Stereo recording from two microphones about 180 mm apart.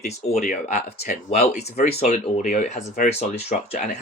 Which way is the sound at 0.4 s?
40° left (ahead or behind).